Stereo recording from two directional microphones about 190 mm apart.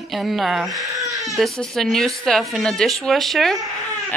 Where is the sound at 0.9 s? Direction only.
15° right (ahead or behind).